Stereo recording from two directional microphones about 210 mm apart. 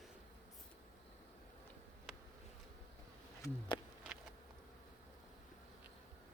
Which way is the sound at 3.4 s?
20° left (ahead or behind).